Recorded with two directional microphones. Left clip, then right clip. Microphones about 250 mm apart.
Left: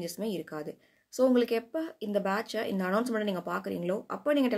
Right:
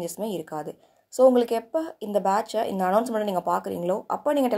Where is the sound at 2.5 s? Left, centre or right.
Right.